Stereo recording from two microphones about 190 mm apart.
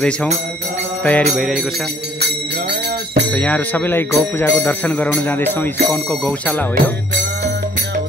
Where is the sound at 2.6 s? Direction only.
55° right (ahead or behind).